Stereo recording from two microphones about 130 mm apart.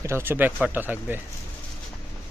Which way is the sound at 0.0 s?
20° right (ahead or behind).